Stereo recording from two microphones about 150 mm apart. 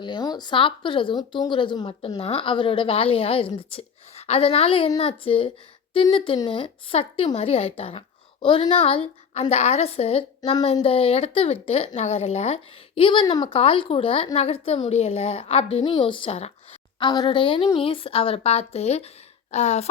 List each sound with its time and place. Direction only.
0.0 s a woman's voice: 30° left (ahead or behind); by 19.9 s 50° left (ahead or behind)